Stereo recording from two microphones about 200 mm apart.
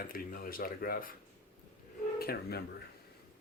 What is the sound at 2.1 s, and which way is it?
Speech, 50° left (ahead or behind).